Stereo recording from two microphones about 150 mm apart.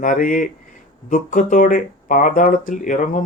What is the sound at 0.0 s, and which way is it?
Speech, 60° left (ahead or behind).